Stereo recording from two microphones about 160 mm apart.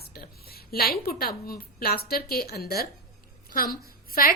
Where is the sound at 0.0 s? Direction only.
70° left (ahead or behind).